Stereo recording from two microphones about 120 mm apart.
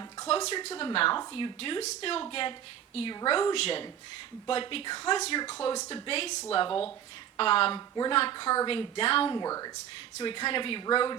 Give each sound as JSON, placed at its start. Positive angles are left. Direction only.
{"t": 0.3, "sound": "speech", "side_deg": 55}
{"t": 1.8, "sound": "speech", "side_deg": 60}
{"t": 9.3, "sound": "speech", "side_deg": 30}
{"t": 10.2, "sound": "speech", "side_deg": 45}